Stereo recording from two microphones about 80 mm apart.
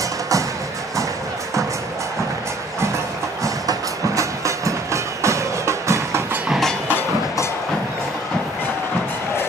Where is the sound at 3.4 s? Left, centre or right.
Right.